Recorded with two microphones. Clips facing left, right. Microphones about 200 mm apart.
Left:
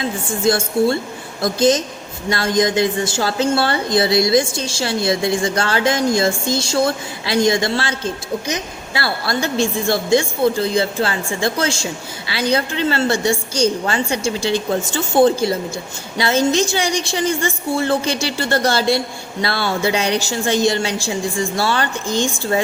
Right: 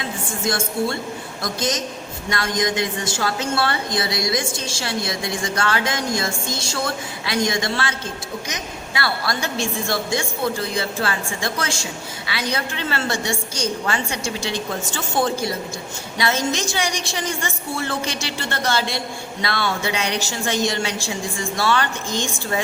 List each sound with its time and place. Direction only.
0.0 s a woman's voice: 30° left (ahead or behind)